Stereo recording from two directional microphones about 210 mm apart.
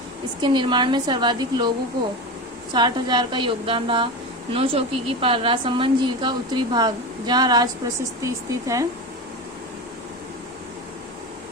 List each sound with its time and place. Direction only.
0.4 s a woman's voice: 20° right (ahead or behind)
2.7 s a woman's voice: 20° right (ahead or behind)